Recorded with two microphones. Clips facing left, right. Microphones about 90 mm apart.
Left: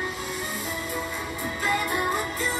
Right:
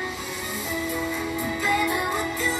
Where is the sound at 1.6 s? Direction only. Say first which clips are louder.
Right 1 dB; 40° left (ahead or behind).